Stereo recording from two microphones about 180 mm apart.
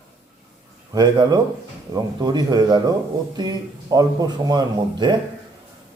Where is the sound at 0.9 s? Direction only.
25° right (ahead or behind).